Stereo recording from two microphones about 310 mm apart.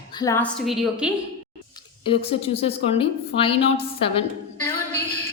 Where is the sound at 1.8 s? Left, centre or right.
Centre.